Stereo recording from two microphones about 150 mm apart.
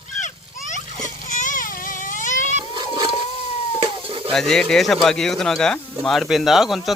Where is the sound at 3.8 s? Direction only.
35° right (ahead or behind).